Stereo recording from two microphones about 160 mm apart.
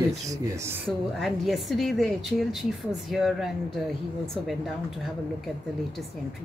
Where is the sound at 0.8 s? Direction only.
Centre (ahead or behind).